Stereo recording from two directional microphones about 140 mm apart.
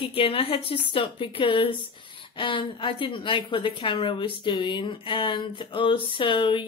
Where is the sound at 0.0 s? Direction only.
40° left (ahead or behind).